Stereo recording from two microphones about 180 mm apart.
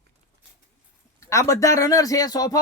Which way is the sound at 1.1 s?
15° left (ahead or behind).